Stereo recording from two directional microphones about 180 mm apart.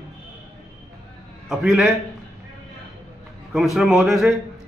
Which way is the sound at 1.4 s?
Centre (ahead or behind).